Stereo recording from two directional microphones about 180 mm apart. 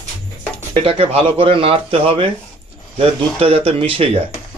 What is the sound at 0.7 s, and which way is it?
A man's voice, 35° right (ahead or behind).